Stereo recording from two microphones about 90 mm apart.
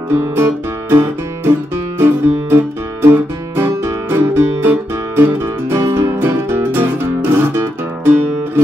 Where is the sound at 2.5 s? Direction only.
25° right (ahead or behind).